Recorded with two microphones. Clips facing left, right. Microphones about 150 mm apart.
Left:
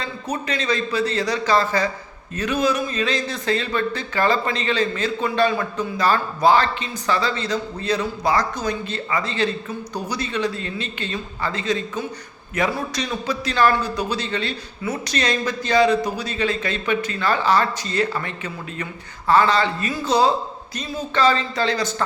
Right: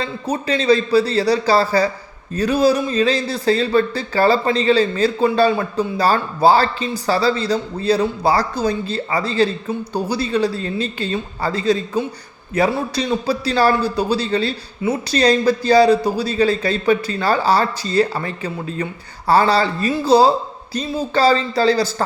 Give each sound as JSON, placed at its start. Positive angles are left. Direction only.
{"t": 0.0, "sound": "speech", "side_deg": -30}